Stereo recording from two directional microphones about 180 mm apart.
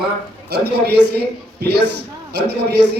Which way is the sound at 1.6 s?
65° right (ahead or behind).